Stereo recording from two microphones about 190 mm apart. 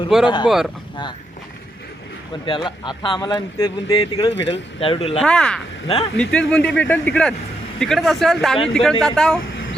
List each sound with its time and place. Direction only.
0.1 s speech: centre (ahead or behind)
2.6 s speech: 25° left (ahead or behind)
4.3 s speech: 70° left (ahead or behind)
4.5 s speech: 30° left (ahead or behind)
5.2 s speech: 5° left (ahead or behind)